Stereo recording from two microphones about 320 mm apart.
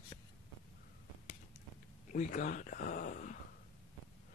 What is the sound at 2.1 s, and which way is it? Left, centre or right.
Speech, left.